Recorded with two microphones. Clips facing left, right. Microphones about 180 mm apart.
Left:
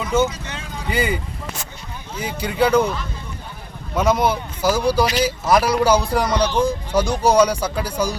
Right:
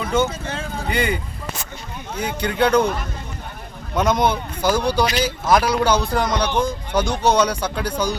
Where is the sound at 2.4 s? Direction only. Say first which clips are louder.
Even; 5° left (ahead or behind).